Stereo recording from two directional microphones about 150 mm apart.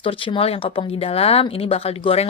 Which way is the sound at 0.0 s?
35° left (ahead or behind).